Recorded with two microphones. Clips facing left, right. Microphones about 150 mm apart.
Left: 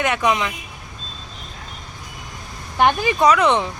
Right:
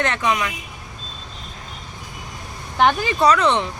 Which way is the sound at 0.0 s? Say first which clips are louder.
Left 2 dB; 15° left (ahead or behind).